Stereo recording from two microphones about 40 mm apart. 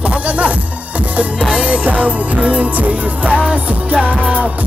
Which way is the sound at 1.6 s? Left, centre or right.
Right.